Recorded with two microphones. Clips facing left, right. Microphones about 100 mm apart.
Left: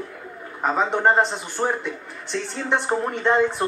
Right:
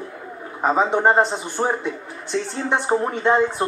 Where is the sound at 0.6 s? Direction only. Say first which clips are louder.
Right 2 dB; 5° right (ahead or behind).